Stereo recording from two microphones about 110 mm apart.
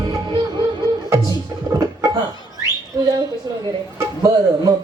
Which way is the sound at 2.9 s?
30° right (ahead or behind).